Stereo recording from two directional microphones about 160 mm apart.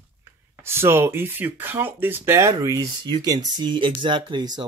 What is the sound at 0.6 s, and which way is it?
Speech, 15° right (ahead or behind).